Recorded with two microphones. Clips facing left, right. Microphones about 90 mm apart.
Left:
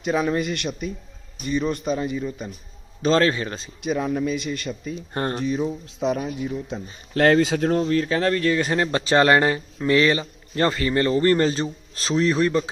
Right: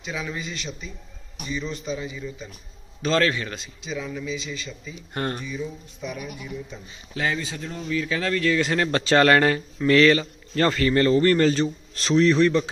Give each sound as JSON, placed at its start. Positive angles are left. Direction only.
{"t": 0.0, "sound": "a man's voice", "side_deg": 50}
{"t": 3.0, "sound": "a man's voice", "side_deg": 35}
{"t": 3.8, "sound": "a man's voice", "side_deg": 55}
{"t": 5.1, "sound": "speech", "side_deg": 30}
{"t": 5.4, "sound": "speech", "side_deg": 70}
{"t": 6.7, "sound": "speech", "side_deg": 65}
{"t": 7.9, "sound": "a man's voice", "side_deg": 45}
{"t": 8.8, "sound": "speech", "side_deg": 20}